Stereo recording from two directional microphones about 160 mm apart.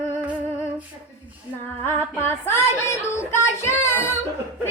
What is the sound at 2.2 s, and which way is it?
Child singing, 15° left (ahead or behind).